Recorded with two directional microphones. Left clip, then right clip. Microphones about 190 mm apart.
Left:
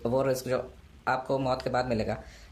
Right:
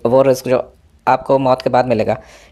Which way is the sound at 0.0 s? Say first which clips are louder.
Right 15 dB; 35° right (ahead or behind).